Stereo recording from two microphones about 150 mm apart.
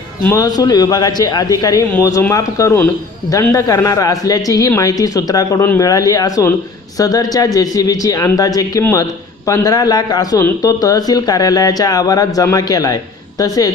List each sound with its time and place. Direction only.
0.3 s speech: 25° left (ahead or behind)